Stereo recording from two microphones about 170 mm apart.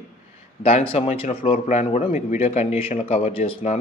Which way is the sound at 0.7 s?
40° left (ahead or behind).